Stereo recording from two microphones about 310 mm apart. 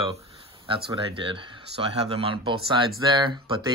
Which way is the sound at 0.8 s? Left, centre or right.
Centre.